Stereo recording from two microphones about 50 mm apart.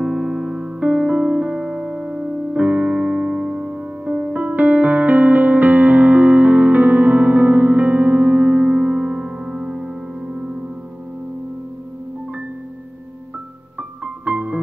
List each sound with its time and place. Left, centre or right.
0.0 s keyboard: centre
0.7 s piano: right
2.6 s music: right
13.7 s music: right